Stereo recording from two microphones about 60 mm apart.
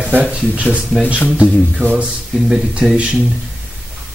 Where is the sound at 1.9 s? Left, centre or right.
Centre.